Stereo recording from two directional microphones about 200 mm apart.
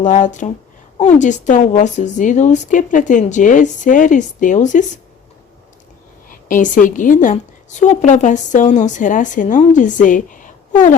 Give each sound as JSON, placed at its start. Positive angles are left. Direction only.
{"t": 0.0, "sound": "a woman's voice", "side_deg": 35}
{"t": 6.2, "sound": "a woman's voice", "side_deg": 40}